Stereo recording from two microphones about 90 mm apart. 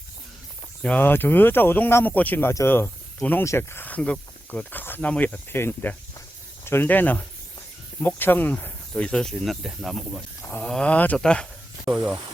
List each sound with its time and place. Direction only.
0.8 s speech: 15° left (ahead or behind)